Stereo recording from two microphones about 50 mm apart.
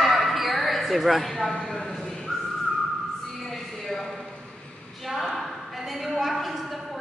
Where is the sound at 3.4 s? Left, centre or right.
Centre.